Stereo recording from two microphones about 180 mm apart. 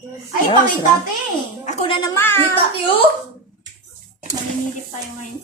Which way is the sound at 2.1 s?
15° left (ahead or behind).